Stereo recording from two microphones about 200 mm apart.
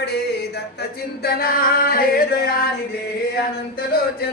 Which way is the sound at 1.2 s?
50° left (ahead or behind).